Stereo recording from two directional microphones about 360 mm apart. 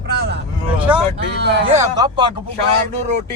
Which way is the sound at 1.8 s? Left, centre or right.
Centre.